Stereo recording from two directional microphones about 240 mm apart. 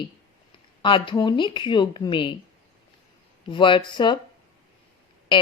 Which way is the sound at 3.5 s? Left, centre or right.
Left.